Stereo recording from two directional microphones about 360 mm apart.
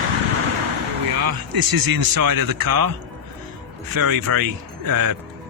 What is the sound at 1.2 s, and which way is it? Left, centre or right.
Speech, right.